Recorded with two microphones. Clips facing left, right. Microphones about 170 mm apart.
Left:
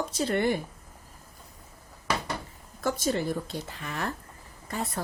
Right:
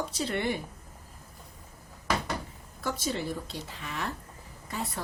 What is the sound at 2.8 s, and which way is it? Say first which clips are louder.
Speech: left 4 dB; 45° left (ahead or behind).